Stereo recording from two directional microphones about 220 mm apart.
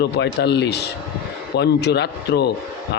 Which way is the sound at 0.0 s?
50° left (ahead or behind).